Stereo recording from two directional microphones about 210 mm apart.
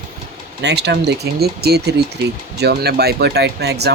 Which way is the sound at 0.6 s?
55° right (ahead or behind).